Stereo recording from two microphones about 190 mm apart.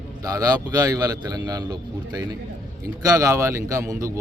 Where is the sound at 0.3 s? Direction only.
20° right (ahead or behind).